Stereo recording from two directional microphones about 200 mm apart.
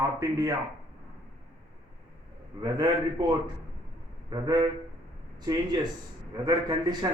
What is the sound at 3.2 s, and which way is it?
A man's voice, 20° right (ahead or behind).